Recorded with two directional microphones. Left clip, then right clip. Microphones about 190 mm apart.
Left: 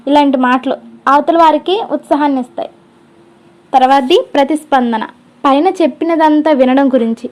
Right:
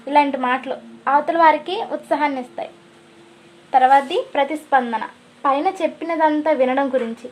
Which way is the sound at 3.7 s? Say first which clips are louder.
Left 6 dB; 30° left (ahead or behind).